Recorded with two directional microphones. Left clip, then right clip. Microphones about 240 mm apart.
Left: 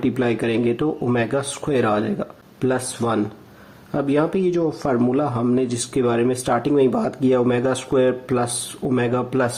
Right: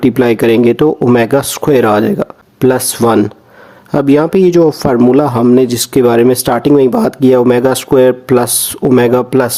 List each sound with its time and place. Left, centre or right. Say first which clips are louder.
0.0 s speech: right 12 dB; right